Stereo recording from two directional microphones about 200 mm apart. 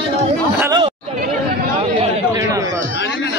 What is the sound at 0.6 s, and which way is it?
Chatter, 15° right (ahead or behind).